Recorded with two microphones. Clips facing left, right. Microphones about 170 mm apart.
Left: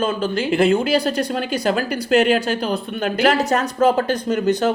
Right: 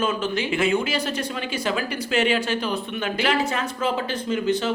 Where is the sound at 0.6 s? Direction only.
35° left (ahead or behind).